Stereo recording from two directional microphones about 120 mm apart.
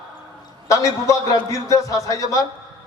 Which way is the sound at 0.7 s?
25° left (ahead or behind).